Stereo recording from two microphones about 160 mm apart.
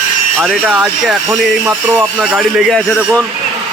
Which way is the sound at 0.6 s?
5° right (ahead or behind).